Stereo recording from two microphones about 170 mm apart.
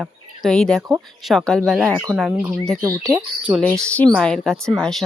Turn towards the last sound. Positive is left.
turn(degrees=0)  # may be behind; listen again after turning